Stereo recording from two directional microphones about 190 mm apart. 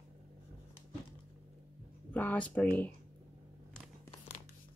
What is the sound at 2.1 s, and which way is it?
Speech, 10° left (ahead or behind).